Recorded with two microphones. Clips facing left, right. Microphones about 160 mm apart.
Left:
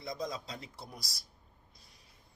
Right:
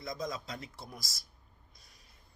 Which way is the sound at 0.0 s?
30° left (ahead or behind).